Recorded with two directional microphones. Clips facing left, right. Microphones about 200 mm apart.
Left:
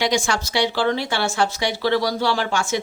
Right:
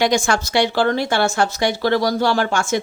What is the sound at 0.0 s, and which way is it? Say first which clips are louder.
Speech: right 4 dB; 50° right (ahead or behind).